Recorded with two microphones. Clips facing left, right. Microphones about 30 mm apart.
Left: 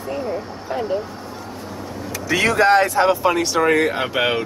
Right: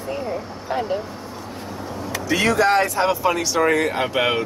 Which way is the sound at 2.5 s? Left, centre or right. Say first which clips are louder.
Left 6 dB; left.